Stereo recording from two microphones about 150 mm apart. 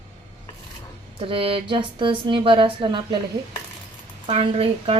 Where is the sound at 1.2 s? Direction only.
35° right (ahead or behind).